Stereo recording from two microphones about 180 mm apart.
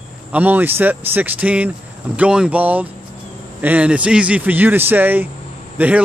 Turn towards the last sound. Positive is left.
turn(degrees=-10)  # may be behind; listen again after turning